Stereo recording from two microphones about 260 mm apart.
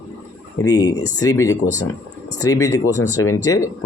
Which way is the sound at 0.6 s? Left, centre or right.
Centre.